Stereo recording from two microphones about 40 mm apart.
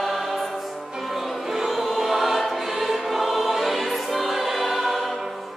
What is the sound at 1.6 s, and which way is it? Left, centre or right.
Choir, centre.